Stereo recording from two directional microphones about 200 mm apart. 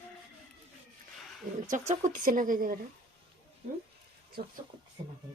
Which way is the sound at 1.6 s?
40° right (ahead or behind).